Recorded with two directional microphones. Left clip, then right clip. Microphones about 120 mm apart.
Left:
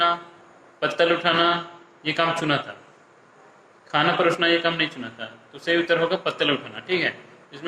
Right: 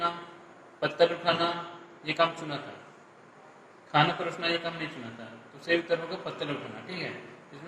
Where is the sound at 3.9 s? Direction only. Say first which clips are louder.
Left 6 dB; 20° left (ahead or behind).